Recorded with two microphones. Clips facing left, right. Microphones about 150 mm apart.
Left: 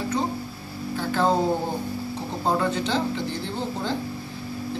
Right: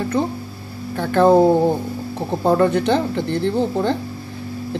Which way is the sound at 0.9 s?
60° right (ahead or behind).